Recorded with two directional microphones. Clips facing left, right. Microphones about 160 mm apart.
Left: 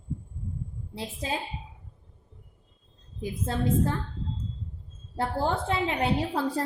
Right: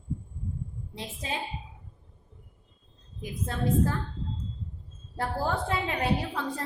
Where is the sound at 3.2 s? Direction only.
30° left (ahead or behind).